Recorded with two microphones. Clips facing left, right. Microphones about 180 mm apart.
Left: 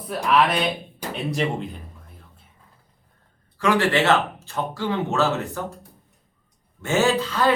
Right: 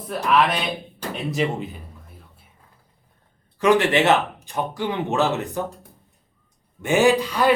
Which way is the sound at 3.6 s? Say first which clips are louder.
Right 3 dB; 20° right (ahead or behind).